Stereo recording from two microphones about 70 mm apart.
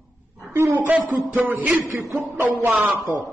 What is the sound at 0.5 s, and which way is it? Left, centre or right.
Speech, right.